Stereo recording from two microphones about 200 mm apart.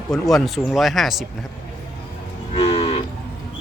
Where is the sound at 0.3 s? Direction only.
Centre (ahead or behind).